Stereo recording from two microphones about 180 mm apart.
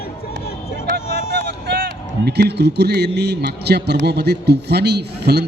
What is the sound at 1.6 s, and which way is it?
A man's voice, 65° right (ahead or behind).